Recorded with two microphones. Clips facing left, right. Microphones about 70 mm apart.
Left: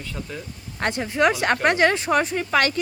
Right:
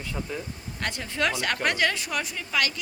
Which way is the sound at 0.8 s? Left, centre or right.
Left.